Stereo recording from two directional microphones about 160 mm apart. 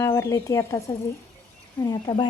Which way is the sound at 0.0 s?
20° left (ahead or behind).